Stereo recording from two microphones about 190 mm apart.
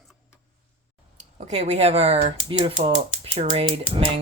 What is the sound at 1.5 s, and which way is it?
Speech, 35° right (ahead or behind).